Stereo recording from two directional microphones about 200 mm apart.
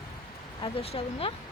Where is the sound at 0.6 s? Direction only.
30° left (ahead or behind).